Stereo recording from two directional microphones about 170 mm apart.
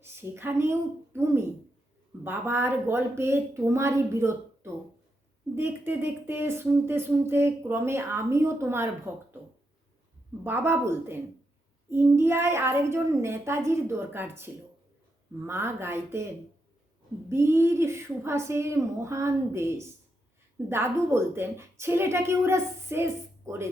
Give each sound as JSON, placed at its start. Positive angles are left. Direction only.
{"t": 0.0, "sound": "a woman's voice", "side_deg": -15}
{"t": 10.4, "sound": "speech", "side_deg": -15}
{"t": 17.2, "sound": "speech", "side_deg": -15}